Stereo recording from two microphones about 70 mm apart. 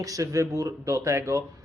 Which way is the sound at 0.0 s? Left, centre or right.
Right.